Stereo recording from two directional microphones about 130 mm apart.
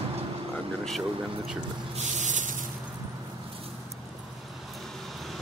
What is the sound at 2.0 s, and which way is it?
Spray, 70° right (ahead or behind).